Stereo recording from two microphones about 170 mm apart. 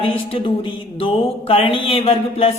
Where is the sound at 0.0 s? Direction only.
30° left (ahead or behind).